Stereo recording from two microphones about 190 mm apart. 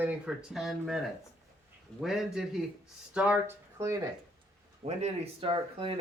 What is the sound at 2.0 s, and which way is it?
A man's voice, centre (ahead or behind).